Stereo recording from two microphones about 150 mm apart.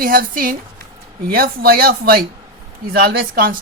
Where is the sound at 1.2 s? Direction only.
90° right; by 3.5 s 75° right (ahead or behind).